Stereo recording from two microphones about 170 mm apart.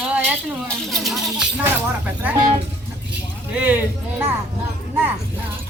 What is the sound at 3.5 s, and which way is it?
Speech, 10° right (ahead or behind).